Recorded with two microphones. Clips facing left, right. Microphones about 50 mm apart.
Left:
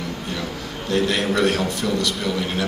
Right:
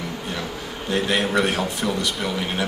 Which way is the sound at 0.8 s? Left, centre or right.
Right.